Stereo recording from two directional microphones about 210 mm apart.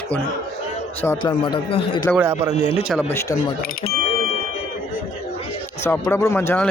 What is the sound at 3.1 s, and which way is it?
Speech, 10° left (ahead or behind).